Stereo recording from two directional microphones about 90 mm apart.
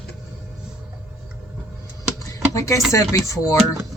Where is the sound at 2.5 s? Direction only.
35° left (ahead or behind).